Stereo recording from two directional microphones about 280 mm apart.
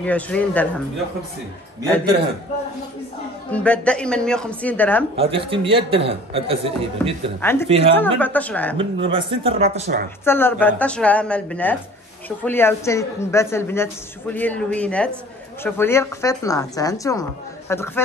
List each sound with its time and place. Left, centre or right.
0.0 s a woman's voice: centre
3.5 s a woman's voice: centre
5.1 s a man's voice: centre
7.9 s a woman's voice: centre
8.7 s a man's voice: centre
10.2 s a woman's voice: centre